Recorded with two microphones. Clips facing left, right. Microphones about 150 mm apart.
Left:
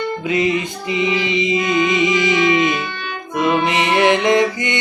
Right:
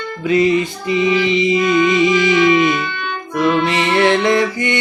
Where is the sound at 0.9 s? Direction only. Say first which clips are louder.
Right 4 dB; 20° left (ahead or behind).